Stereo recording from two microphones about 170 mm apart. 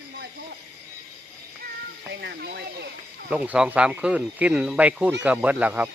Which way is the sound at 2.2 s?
70° right (ahead or behind).